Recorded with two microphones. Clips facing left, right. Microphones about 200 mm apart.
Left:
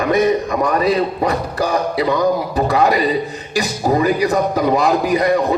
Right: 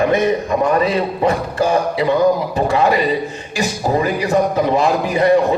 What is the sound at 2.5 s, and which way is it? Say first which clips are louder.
Speech: even; 35° left (ahead or behind).